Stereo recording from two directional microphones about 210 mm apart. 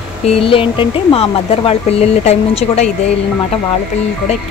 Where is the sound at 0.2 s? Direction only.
25° left (ahead or behind).